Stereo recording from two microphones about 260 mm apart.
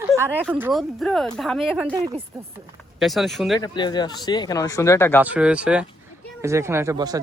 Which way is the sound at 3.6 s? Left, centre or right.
Centre.